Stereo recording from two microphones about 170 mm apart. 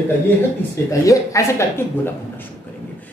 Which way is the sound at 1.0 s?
20° left (ahead or behind).